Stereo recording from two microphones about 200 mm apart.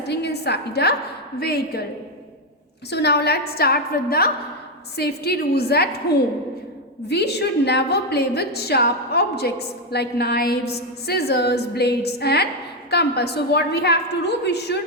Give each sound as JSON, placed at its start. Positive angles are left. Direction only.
{"t": 0.1, "sound": "a woman's voice", "side_deg": 55}
{"t": 2.9, "sound": "a woman's voice", "side_deg": 55}
{"t": 7.1, "sound": "a woman's voice", "side_deg": 55}